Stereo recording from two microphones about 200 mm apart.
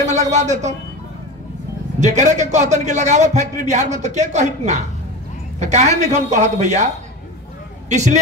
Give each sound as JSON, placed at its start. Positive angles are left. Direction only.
{"t": 0.0, "sound": "a man's voice", "side_deg": -35}
{"t": 2.0, "sound": "a man's voice", "side_deg": -35}
{"t": 7.9, "sound": "a man's voice", "side_deg": -35}